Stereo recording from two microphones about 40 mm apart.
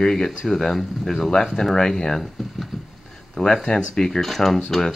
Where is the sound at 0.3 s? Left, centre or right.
Centre.